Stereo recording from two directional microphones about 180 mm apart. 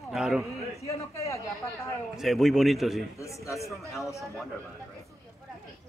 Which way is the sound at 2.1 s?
Centre (ahead or behind).